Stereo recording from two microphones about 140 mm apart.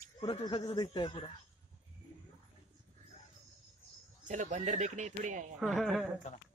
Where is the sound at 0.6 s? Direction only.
30° left (ahead or behind).